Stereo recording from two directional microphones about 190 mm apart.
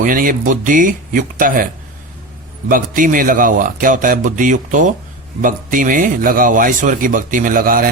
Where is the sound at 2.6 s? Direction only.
45° right (ahead or behind).